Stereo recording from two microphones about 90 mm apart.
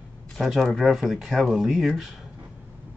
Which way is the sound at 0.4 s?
Centre (ahead or behind).